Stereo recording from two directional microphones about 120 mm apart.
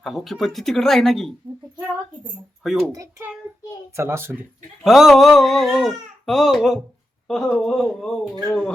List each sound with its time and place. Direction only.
0.0 s speech: centre (ahead or behind)
2.6 s speech: centre (ahead or behind)
2.9 s a child's voice: 30° right (ahead or behind)
4.8 s speech: centre (ahead or behind)